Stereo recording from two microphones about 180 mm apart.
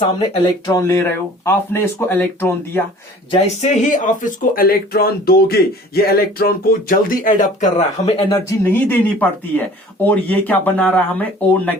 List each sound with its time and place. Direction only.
0.7 s speech: 15° left (ahead or behind)
3.3 s speech: 35° left (ahead or behind)
8.3 s speech: 10° left (ahead or behind)